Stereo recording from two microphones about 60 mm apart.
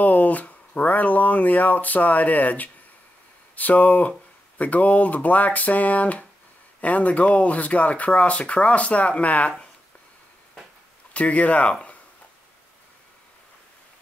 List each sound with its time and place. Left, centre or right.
0.0 s speech: left
11.1 s speech: left